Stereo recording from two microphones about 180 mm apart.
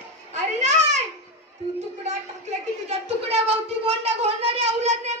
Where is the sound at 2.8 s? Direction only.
35° right (ahead or behind).